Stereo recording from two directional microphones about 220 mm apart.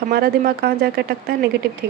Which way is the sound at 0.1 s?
45° right (ahead or behind).